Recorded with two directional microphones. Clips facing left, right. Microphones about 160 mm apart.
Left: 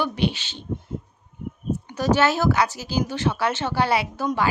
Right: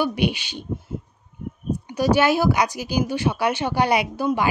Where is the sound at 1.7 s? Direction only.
10° right (ahead or behind).